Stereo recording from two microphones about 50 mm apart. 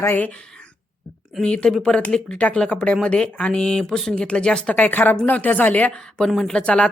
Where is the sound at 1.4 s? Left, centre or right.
Centre.